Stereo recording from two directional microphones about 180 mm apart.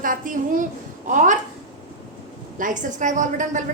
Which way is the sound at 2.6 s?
45° right (ahead or behind).